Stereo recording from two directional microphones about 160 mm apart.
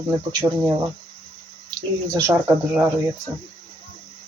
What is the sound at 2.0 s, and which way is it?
Speech, 20° right (ahead or behind).